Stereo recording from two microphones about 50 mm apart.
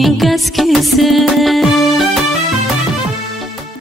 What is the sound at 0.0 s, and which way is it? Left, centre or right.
Music, centre.